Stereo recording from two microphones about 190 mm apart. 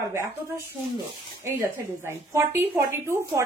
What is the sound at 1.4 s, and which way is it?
A woman's voice, 15° right (ahead or behind).